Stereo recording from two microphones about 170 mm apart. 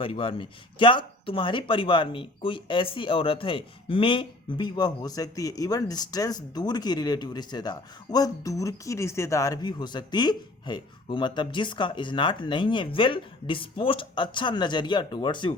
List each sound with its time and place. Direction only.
0.0 s speech: 30° left (ahead or behind)